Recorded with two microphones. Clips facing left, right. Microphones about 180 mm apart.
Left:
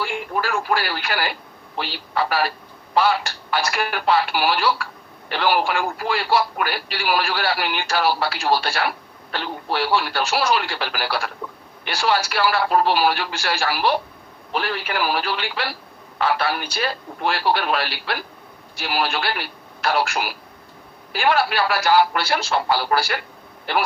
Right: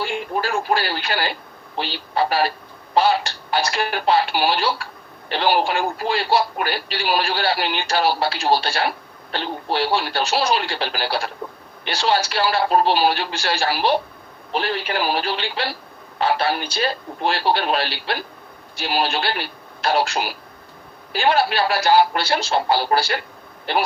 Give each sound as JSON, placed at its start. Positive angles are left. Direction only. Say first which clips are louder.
{"t": 0.0, "sound": "speech", "louder": "right 1 dB", "side_deg": -25}